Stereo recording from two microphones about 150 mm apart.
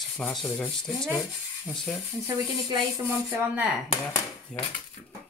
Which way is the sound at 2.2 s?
25° right (ahead or behind).